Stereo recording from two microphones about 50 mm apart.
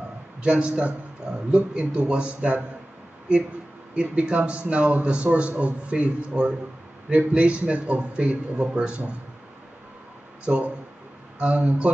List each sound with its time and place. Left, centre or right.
0.4 s a man's voice: right
3.9 s a man's voice: centre
10.4 s a man's voice: right